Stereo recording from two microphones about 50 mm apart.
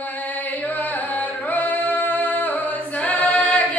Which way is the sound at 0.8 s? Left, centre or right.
Left.